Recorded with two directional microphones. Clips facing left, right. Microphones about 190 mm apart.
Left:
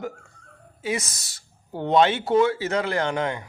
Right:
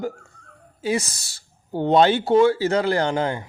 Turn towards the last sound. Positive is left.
turn(degrees=-30)  # may be behind; listen again after turning